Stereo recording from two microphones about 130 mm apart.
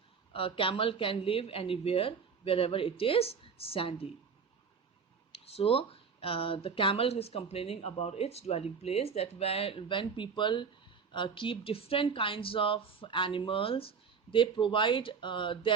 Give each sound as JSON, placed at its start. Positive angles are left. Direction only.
{"t": 0.3, "sound": "speech", "side_deg": 45}
{"t": 5.3, "sound": "speech", "side_deg": 50}